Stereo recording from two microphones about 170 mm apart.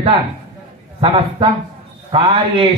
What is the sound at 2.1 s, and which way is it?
Speech, 30° right (ahead or behind).